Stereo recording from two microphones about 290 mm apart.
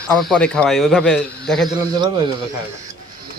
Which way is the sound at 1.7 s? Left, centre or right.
Centre.